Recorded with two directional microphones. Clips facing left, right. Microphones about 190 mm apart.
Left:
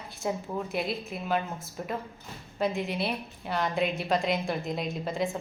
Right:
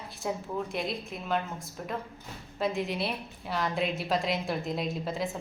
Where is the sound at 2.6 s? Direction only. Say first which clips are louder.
Left 1 dB; centre (ahead or behind).